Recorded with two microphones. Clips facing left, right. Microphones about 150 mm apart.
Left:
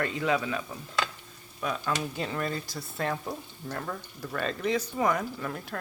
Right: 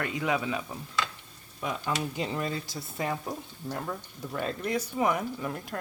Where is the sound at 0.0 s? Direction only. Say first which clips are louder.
Left 1 dB; 15° right (ahead or behind).